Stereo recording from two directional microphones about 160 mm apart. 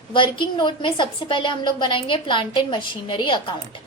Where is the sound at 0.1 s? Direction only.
30° left (ahead or behind).